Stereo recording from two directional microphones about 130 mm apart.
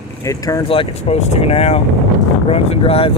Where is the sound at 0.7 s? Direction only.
45° left (ahead or behind).